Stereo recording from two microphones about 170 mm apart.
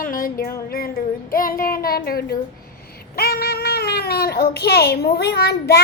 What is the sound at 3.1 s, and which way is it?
Cat, 65° left (ahead or behind).